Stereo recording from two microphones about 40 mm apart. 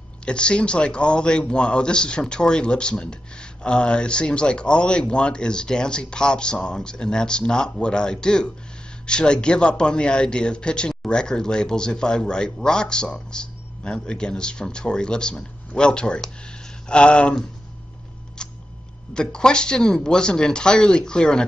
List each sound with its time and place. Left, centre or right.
0.2 s a man's voice: left
18.4 s a sound: centre
19.1 s a man's voice: centre